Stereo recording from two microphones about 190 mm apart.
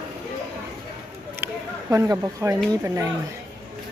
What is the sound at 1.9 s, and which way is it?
A woman's voice, 15° right (ahead or behind).